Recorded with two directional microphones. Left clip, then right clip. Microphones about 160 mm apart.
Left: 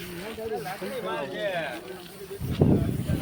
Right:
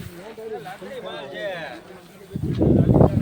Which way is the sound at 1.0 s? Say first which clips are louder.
Even; 5° left (ahead or behind).